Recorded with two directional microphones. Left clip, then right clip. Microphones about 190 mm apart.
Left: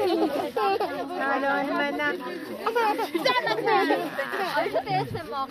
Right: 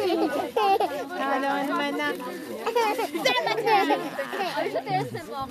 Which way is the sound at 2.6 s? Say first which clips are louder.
Even; 15° right (ahead or behind).